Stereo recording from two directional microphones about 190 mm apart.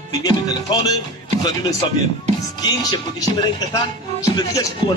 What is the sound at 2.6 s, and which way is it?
Speech, 20° left (ahead or behind).